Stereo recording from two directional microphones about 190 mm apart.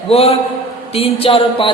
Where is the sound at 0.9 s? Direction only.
30° left (ahead or behind).